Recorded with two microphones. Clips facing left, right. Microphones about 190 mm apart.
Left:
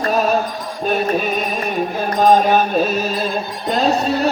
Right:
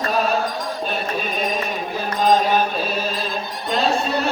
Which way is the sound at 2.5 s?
50° left (ahead or behind).